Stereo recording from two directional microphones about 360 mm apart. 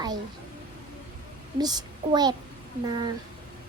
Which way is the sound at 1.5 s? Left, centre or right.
Centre.